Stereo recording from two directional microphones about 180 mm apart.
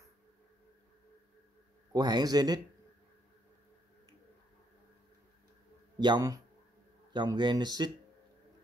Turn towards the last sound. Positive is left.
turn(degrees=-25)  # may be behind; listen again after turning